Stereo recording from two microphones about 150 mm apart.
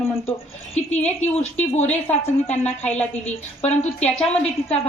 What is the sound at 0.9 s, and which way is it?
A woman's voice, 50° left (ahead or behind).